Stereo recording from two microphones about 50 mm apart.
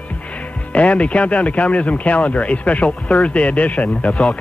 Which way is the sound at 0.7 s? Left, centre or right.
Left.